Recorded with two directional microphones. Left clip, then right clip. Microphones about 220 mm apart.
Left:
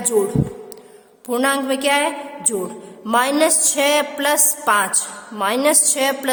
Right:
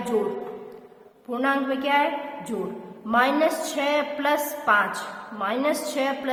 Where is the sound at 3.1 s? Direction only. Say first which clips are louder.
Left 4 dB; 50° left (ahead or behind).